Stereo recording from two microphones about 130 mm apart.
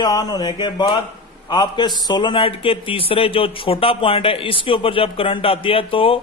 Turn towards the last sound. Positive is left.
turn(degrees=45)  # may be behind; listen again after turning